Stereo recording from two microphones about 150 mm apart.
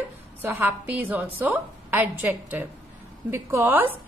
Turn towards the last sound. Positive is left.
turn(degrees=-10)  # may be behind; listen again after turning